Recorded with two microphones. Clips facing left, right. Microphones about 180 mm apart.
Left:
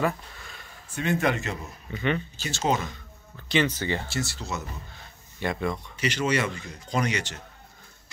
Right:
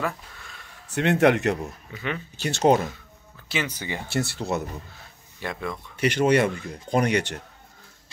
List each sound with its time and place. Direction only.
0.0 s a sound: centre (ahead or behind)
0.8 s speech: 75° right (ahead or behind)
1.9 s speech: centre (ahead or behind)
2.3 s speech: 60° right (ahead or behind)
3.4 s speech: 10° right (ahead or behind)
4.1 s speech: 60° right (ahead or behind)
4.9 s a sound: centre (ahead or behind)
5.9 s speech: 55° right (ahead or behind)